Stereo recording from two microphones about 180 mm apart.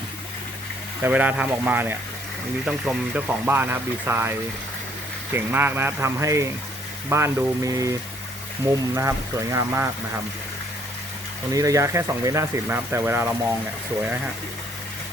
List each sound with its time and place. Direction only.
1.0 s speech: 10° right (ahead or behind)
11.5 s speech: 20° right (ahead or behind)